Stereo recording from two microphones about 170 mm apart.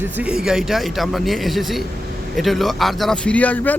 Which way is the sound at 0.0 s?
10° right (ahead or behind).